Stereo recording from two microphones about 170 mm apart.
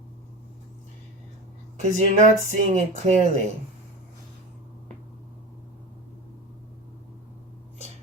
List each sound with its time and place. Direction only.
1.8 s speech: 45° right (ahead or behind)